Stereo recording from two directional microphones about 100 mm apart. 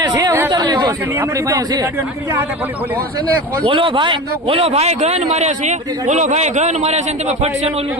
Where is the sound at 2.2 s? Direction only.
25° right (ahead or behind).